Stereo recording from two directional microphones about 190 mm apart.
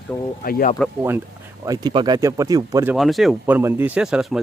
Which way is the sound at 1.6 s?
20° right (ahead or behind).